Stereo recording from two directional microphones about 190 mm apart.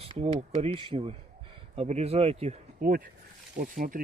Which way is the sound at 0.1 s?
30° right (ahead or behind).